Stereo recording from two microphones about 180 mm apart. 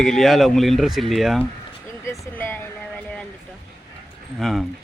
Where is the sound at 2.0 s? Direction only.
10° left (ahead or behind).